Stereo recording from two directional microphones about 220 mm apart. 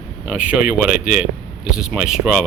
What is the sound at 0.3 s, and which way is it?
Speech, 5° right (ahead or behind).